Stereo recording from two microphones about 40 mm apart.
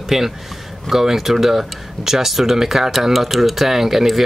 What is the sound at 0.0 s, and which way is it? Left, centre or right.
Speech, centre.